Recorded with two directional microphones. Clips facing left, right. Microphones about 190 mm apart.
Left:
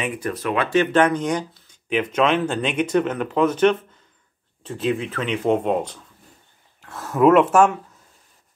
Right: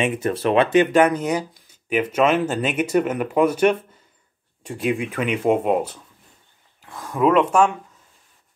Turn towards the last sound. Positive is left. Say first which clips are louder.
# left 2 dB
turn(degrees=5)  # may be behind; listen again after turning